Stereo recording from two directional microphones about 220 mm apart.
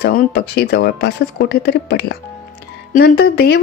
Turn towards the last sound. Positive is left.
turn(degrees=45)  # may be behind; listen again after turning